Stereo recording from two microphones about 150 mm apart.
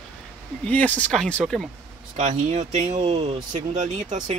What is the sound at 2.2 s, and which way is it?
Speech, 50° right (ahead or behind).